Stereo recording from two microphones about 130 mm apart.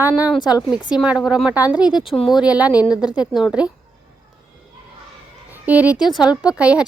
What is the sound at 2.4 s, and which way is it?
Speech, 10° right (ahead or behind).